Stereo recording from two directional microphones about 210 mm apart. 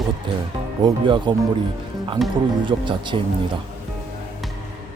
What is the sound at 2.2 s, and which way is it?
Speech, centre (ahead or behind).